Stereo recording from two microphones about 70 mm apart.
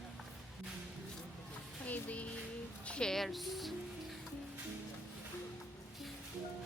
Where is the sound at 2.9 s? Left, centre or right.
Centre.